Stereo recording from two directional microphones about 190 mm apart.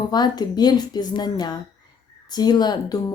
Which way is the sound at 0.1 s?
20° left (ahead or behind).